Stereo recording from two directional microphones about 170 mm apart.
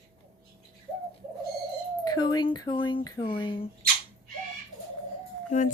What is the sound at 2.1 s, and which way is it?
Speech, 25° left (ahead or behind).